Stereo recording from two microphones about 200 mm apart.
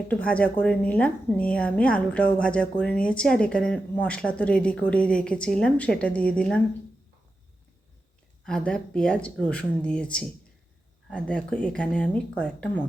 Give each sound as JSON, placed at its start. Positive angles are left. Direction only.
{"t": 0.1, "sound": "speech", "side_deg": 5}
{"t": 8.4, "sound": "speech", "side_deg": 5}